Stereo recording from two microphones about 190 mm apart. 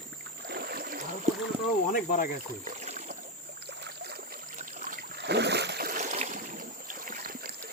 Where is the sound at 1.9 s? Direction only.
45° left (ahead or behind).